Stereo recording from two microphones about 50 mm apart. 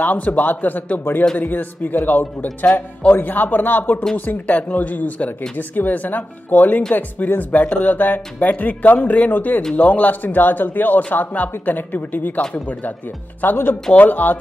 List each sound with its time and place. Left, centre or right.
0.0 s speech: left
13.4 s speech: left